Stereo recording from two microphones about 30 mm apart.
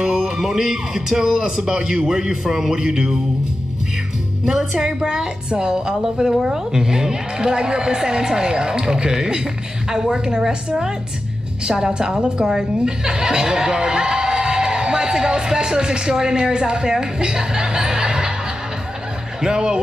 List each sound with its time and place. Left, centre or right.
0.0 s music: right
0.4 s a man's voice: centre
4.6 s a man's voice: centre
5.0 s a woman's voice: right
12.4 s a man's voice: centre
12.8 s speech: right
19.4 s a woman's voice: right